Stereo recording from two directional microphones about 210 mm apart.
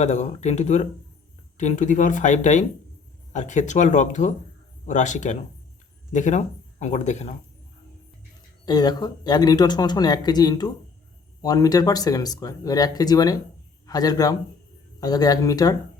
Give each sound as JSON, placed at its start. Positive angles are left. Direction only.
{"t": 0.0, "sound": "speech", "side_deg": 35}
{"t": 8.6, "sound": "speech", "side_deg": 20}